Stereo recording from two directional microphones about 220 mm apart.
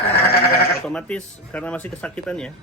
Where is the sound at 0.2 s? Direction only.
45° left (ahead or behind).